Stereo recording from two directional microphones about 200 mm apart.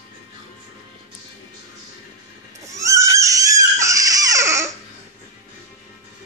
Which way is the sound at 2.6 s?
15° right (ahead or behind).